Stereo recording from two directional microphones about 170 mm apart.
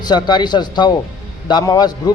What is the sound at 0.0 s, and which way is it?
A man's voice, 25° left (ahead or behind).